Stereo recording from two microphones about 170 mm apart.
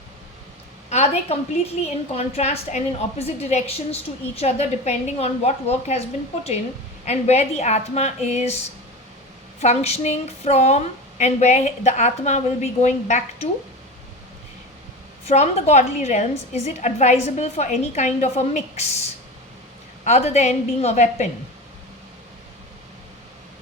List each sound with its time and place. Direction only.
0.9 s a woman's voice: 40° left (ahead or behind)
7.0 s a woman's voice: 40° left (ahead or behind)
9.6 s a woman's voice: 40° left (ahead or behind)
15.3 s a woman's voice: 40° left (ahead or behind)
20.1 s a woman's voice: 40° left (ahead or behind)